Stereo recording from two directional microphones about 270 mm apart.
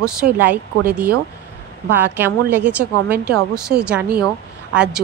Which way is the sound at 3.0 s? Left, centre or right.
Right.